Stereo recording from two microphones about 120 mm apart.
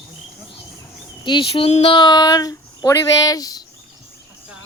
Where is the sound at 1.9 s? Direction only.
35° left (ahead or behind).